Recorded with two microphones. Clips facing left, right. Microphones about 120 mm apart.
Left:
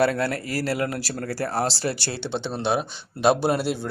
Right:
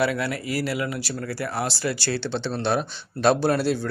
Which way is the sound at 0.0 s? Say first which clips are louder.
Left 2 dB; 40° left (ahead or behind).